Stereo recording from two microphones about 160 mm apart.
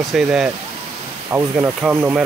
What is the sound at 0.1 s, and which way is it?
Speech, 5° right (ahead or behind).